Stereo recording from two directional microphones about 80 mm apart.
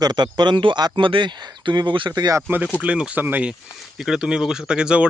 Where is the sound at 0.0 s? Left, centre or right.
Right.